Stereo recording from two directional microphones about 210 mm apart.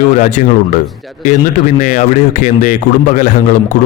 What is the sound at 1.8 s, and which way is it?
A man's voice, 35° left (ahead or behind).